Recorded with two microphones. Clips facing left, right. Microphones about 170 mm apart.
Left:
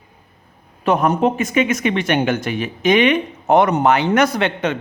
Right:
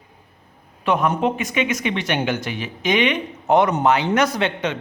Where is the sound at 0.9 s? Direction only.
45° left (ahead or behind).